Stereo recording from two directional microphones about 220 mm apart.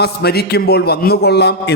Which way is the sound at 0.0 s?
45° left (ahead or behind).